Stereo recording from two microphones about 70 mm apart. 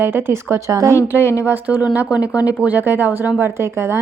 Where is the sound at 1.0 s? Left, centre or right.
Left.